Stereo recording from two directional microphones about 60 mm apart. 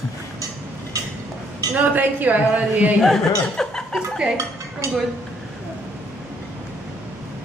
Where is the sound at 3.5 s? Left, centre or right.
Centre.